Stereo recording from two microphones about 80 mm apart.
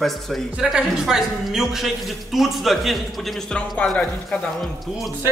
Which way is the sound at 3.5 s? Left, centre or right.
Centre.